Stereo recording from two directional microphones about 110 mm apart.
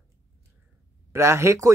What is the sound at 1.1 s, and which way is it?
Speech, 25° right (ahead or behind).